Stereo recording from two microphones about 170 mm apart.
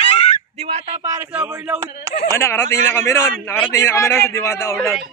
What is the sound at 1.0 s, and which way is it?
Speech, 15° right (ahead or behind).